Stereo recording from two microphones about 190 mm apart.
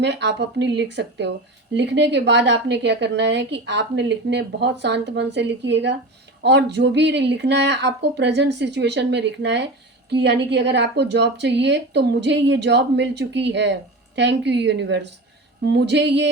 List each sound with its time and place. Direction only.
0.0 s a woman's voice: 65° right (ahead or behind)